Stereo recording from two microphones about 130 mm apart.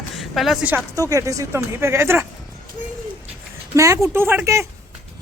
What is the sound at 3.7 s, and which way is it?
Speech, 25° right (ahead or behind).